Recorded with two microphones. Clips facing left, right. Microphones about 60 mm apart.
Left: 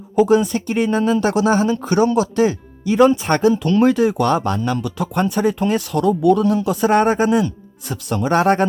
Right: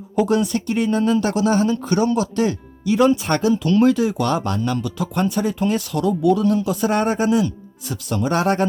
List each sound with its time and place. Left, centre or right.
0.2 s speech: centre
4.8 s speech: left